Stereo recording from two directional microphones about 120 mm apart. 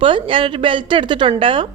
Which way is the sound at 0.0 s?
45° right (ahead or behind).